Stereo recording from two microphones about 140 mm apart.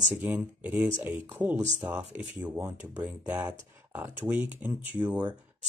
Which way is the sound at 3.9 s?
15° right (ahead or behind).